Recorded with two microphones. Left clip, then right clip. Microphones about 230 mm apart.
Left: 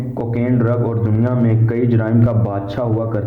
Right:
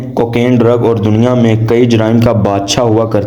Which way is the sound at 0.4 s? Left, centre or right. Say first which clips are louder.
Right 9 dB; right.